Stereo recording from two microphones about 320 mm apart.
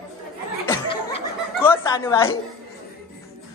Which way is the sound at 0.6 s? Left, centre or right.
Centre.